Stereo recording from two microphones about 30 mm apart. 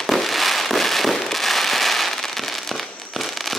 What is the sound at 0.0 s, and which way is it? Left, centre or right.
Fireworks, centre.